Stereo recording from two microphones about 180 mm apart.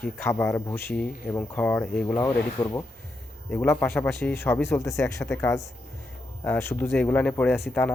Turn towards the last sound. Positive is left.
turn(degrees=5)  # may be behind; listen again after turning